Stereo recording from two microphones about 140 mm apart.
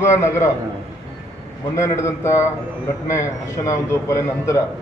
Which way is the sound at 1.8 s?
20° left (ahead or behind).